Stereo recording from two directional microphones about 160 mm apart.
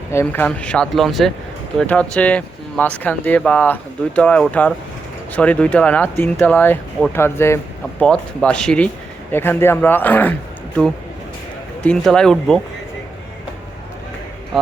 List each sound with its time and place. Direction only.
0.1 s speech: 15° left (ahead or behind)
0.4 s speech: 5° left (ahead or behind)
11.8 s speech: 5° left (ahead or behind)
14.5 s speech: centre (ahead or behind)